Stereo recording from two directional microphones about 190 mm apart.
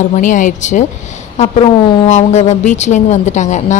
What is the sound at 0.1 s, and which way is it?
A woman's voice, 40° left (ahead or behind).